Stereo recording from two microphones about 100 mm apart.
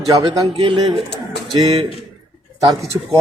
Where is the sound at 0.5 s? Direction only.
70° right (ahead or behind).